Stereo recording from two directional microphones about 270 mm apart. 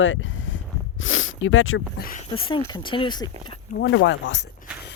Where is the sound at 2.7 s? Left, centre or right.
Centre.